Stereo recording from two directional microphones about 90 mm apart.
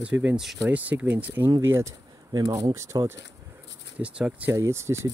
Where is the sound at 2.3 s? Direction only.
50° right (ahead or behind).